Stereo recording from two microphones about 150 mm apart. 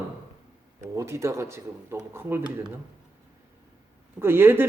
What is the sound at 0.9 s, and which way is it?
Speech, 20° right (ahead or behind).